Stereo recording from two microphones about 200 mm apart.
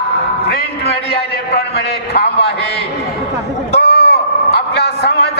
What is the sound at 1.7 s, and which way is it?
Speech, 55° left (ahead or behind).